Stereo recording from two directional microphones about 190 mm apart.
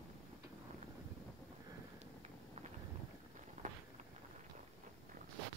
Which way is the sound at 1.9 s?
35° right (ahead or behind).